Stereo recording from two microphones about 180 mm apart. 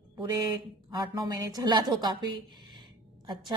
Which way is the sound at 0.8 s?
25° right (ahead or behind).